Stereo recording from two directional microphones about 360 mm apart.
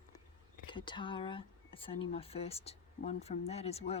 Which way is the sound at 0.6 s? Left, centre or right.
Centre.